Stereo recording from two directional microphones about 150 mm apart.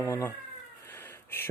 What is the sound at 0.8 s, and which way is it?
Cat, 15° left (ahead or behind).